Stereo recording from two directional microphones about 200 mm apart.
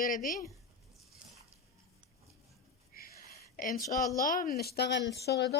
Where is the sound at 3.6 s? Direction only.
45° left (ahead or behind).